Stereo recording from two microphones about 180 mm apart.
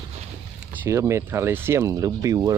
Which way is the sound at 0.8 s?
15° right (ahead or behind).